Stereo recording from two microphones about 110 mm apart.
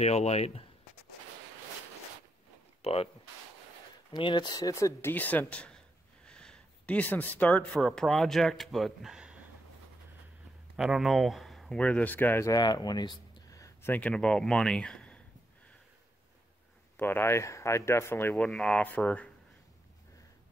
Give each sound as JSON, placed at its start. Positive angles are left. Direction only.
{"t": 0.0, "sound": "speech", "side_deg": 75}
{"t": 2.8, "sound": "speech", "side_deg": 65}
{"t": 4.1, "sound": "speech", "side_deg": 45}
{"t": 5.1, "sound": "speech", "side_deg": 15}
{"t": 10.8, "sound": "speech", "side_deg": -5}
{"t": 12.4, "sound": "speech", "side_deg": 35}
{"t": 13.6, "sound": "a sound", "side_deg": 30}
{"t": 13.9, "sound": "speech", "side_deg": 10}
{"t": 16.9, "sound": "speech", "side_deg": 20}
{"t": 18.4, "sound": "speech", "side_deg": 5}